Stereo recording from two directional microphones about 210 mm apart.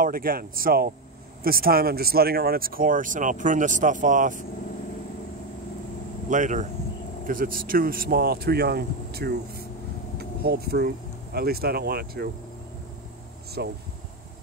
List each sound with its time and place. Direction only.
0.0 s speech: 45° right (ahead or behind)
6.3 s speech: 35° right (ahead or behind)
10.1 s vehicle: 50° right (ahead or behind)
11.3 s speech: 45° right (ahead or behind)
13.6 s speech: 50° right (ahead or behind)